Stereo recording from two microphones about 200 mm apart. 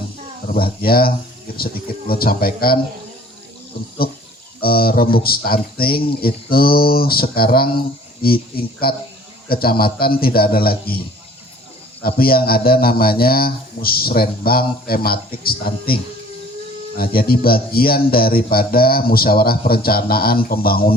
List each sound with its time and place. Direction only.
0.5 s a man's voice: 50° left (ahead or behind)
4.6 s a man's voice: 50° left (ahead or behind)
12.0 s a man's voice: 50° left (ahead or behind)
17.0 s a man's voice: 50° left (ahead or behind)